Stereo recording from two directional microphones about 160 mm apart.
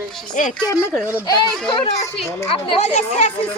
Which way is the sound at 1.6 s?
30° left (ahead or behind).